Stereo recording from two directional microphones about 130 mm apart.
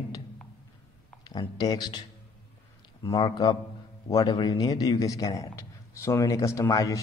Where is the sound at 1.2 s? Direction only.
30° left (ahead or behind).